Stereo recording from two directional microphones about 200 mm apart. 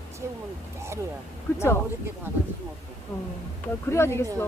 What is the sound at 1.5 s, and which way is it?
Speech, 10° left (ahead or behind).